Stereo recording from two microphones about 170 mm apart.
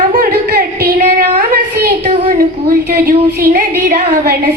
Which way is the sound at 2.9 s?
65° right (ahead or behind).